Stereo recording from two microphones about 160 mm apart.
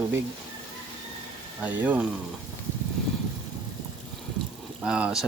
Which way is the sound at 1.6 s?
10° right (ahead or behind).